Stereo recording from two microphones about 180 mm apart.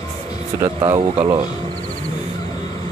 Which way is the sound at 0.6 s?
20° right (ahead or behind).